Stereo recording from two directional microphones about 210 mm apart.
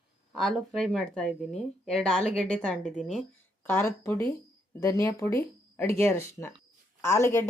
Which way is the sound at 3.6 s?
10° left (ahead or behind).